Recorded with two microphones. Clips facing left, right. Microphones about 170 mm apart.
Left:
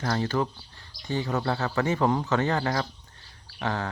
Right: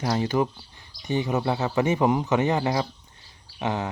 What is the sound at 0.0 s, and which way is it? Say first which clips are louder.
Speech: right 3 dB; 15° right (ahead or behind).